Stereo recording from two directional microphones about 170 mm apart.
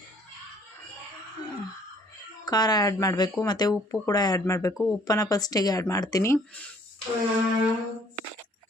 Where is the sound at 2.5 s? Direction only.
25° left (ahead or behind).